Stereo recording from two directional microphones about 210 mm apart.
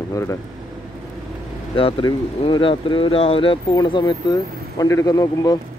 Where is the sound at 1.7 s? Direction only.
25° left (ahead or behind).